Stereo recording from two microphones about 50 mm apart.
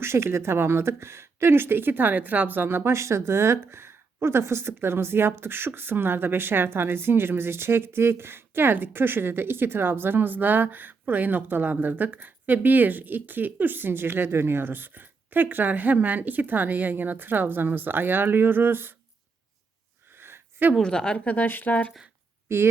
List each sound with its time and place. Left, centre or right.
0.0 s a woman's voice: right
20.1 s a sound: right
20.8 s a woman's voice: centre
21.2 s speech: left
22.4 s speech: right